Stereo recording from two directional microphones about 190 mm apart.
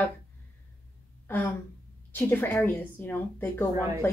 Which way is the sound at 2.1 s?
10° left (ahead or behind).